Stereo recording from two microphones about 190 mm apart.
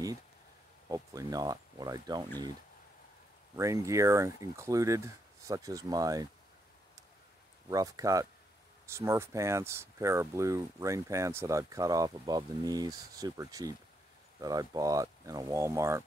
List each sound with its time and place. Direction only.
0.8 s speech: 20° right (ahead or behind)
3.5 s speech: 15° right (ahead or behind)
7.7 s speech: 20° right (ahead or behind)